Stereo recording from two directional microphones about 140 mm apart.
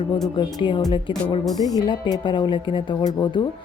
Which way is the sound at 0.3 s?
35° left (ahead or behind).